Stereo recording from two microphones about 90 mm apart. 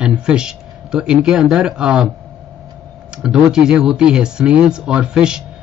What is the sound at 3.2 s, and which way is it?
A man's voice, 5° right (ahead or behind).